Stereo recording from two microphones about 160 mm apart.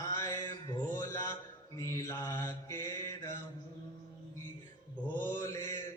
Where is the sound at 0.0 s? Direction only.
20° left (ahead or behind).